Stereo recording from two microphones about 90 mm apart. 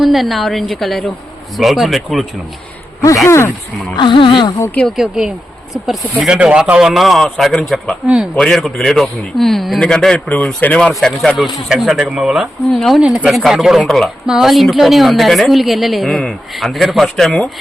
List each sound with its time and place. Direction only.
0.0 s a woman's voice: centre (ahead or behind)
3.2 s speech: 30° left (ahead or behind)
3.9 s speech: 65° left (ahead or behind)
4.9 s a woman's voice: 5° right (ahead or behind)
8.0 s speech: 10° right (ahead or behind)
8.4 s a woman's voice: 5° left (ahead or behind)
10.2 s speech: 15° left (ahead or behind)
11.3 s a woman's voice: centre (ahead or behind)
12.7 s a woman's voice: 5° left (ahead or behind)
13.0 s a woman's voice: 10° right (ahead or behind)